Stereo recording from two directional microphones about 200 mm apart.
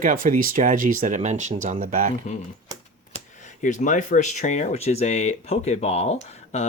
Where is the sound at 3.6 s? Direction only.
40° left (ahead or behind).